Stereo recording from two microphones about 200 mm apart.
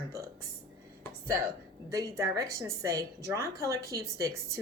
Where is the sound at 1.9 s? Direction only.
15° right (ahead or behind).